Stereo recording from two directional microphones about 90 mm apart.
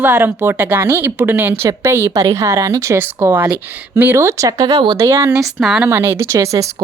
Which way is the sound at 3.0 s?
25° right (ahead or behind).